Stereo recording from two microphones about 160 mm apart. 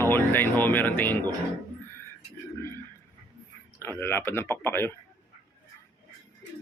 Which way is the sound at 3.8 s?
15° left (ahead or behind).